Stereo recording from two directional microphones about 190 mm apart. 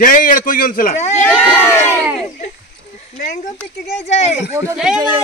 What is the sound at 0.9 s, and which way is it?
Speech, 35° left (ahead or behind).